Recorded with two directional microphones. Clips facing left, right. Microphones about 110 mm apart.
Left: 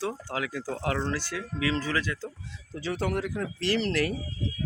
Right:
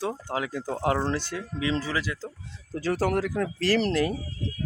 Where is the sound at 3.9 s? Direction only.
25° right (ahead or behind).